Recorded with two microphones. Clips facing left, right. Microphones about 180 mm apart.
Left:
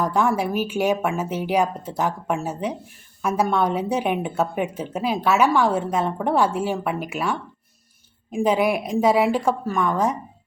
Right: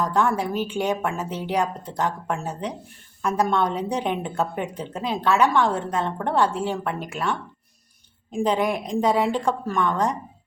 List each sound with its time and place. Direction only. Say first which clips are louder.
0.0 s a woman's voice: left 1 dB; 10° left (ahead or behind)
8.4 s a woman's voice: left 3 dB; 10° left (ahead or behind)